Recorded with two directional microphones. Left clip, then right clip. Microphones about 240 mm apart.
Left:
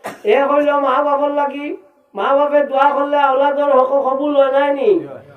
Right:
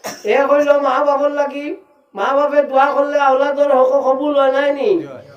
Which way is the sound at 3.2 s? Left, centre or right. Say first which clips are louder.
Right 1 dB; right.